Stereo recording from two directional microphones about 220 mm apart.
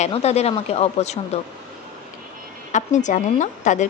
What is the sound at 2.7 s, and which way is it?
A woman's voice, 35° left (ahead or behind).